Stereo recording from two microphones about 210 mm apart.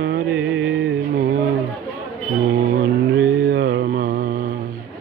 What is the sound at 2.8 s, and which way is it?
Mantra, 50° right (ahead or behind).